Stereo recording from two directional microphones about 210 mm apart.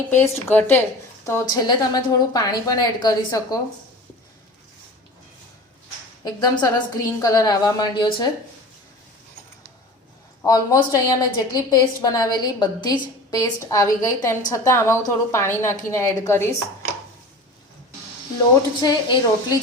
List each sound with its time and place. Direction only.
0.1 s a woman's voice: 10° left (ahead or behind)
6.2 s a woman's voice: 20° left (ahead or behind)
10.4 s a woman's voice: 15° left (ahead or behind)
18.8 s a woman's voice: 20° left (ahead or behind)